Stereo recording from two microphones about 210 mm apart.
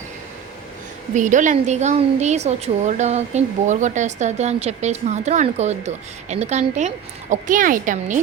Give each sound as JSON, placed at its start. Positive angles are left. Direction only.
{"t": 1.1, "sound": "a woman's voice", "side_deg": -35}